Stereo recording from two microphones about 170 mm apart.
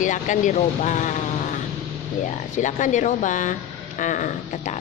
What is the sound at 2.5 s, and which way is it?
A woman's voice, 45° left (ahead or behind).